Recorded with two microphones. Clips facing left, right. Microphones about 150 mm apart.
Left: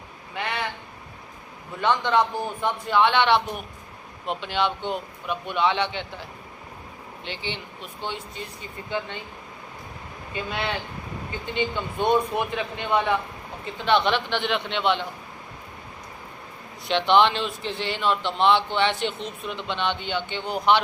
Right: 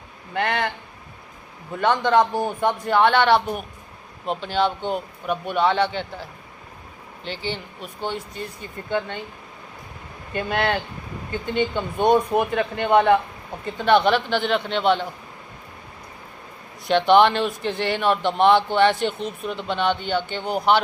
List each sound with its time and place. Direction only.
0.3 s speech: 55° right (ahead or behind)
1.8 s a man's voice: 50° right (ahead or behind)
7.3 s a man's voice: 40° right (ahead or behind)
10.3 s a man's voice: 55° right (ahead or behind)
16.9 s a man's voice: 50° right (ahead or behind)